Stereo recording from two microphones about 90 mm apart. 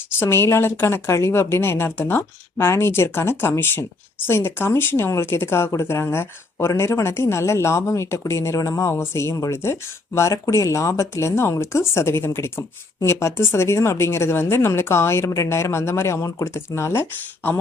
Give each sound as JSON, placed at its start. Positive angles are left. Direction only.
{"t": 0.2, "sound": "speech", "side_deg": 30}